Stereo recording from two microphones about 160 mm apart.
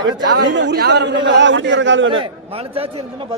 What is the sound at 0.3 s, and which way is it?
Speech, 90° right.